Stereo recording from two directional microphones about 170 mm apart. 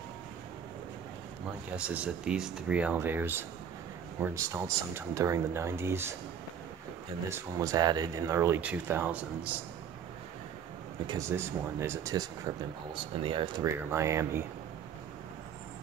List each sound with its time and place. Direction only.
1.8 s speech: 5° right (ahead or behind)
7.2 s speech: 15° right (ahead or behind)
11.1 s speech: 15° right (ahead or behind)
12.9 s speech: 30° right (ahead or behind)
13.7 s speech: 15° right (ahead or behind)